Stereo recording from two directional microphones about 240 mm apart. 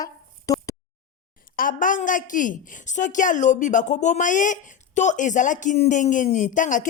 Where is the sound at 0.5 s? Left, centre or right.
Centre.